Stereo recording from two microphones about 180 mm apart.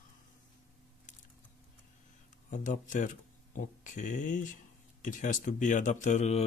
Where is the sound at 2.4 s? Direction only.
45° left (ahead or behind).